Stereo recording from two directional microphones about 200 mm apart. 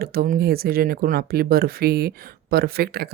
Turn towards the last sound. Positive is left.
turn(degrees=-50)  # may be behind; listen again after turning